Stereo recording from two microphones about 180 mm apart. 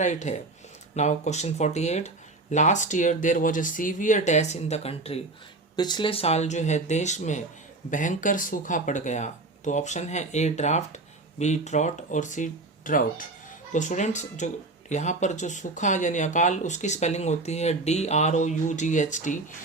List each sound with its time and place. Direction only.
0.0 s speech: 40° left (ahead or behind)
5.7 s speech: 25° left (ahead or behind); by 19.4 s 45° left (ahead or behind)